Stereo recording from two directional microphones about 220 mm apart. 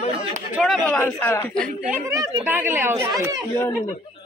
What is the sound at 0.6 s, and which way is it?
A man's voice, 5° left (ahead or behind).